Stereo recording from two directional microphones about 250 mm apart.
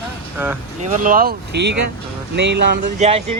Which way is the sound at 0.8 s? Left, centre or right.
Right.